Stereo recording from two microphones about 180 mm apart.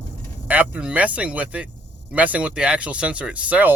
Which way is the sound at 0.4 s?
10° right (ahead or behind).